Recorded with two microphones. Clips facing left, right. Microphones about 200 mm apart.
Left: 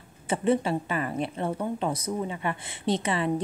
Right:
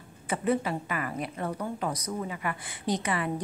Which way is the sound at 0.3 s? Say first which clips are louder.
Left 3 dB; 25° left (ahead or behind).